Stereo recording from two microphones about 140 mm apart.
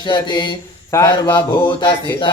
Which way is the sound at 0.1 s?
35° left (ahead or behind).